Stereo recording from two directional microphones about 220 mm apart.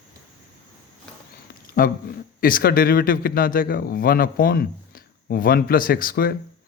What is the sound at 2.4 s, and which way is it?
A man's voice, 40° left (ahead or behind).